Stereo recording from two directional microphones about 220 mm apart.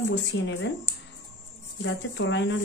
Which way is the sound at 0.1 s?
55° left (ahead or behind).